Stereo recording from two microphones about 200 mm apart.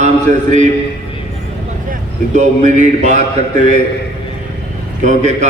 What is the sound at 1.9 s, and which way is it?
A man's voice, 40° right (ahead or behind).